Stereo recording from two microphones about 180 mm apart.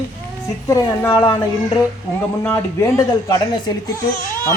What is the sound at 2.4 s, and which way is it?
Speech, 15° left (ahead or behind).